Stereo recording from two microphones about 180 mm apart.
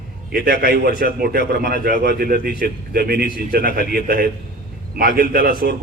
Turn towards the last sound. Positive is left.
turn(degrees=-55)  # may be behind; listen again after turning